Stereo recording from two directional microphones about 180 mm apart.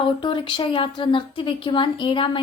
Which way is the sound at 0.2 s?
25° left (ahead or behind).